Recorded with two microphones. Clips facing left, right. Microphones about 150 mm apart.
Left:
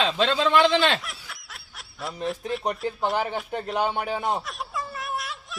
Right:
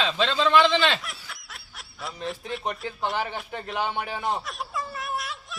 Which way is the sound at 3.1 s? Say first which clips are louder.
Left 3 dB; 45° left (ahead or behind).